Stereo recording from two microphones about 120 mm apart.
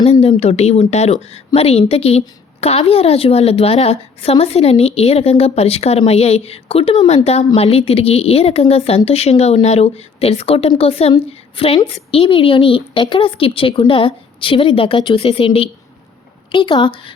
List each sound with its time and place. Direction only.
0.1 s a woman's voice: 55° left (ahead or behind); by 17.2 s 40° left (ahead or behind)